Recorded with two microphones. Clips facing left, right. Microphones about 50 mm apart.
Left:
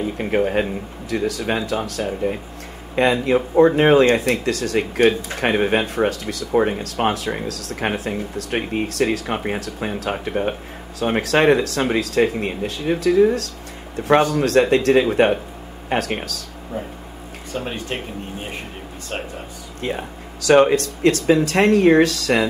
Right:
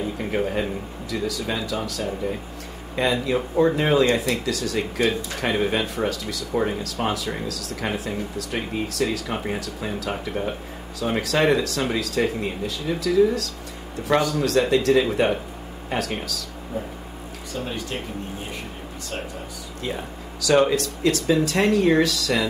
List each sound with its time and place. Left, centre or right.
0.0 s speech: left
0.4 s speech: left
17.6 s speech: left
20.4 s speech: left